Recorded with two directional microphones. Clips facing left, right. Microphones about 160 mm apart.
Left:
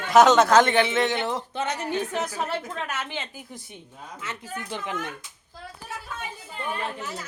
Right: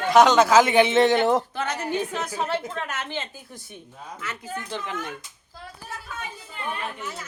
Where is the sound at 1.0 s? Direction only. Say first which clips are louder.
Right 7 dB; 40° right (ahead or behind).